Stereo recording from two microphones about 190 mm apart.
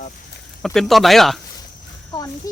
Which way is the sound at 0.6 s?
Centre (ahead or behind).